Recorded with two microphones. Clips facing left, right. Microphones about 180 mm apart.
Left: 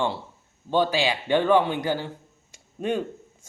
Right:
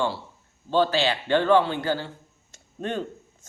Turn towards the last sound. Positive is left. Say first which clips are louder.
# left 3 dB
turn(degrees=10)  # may be behind; listen again after turning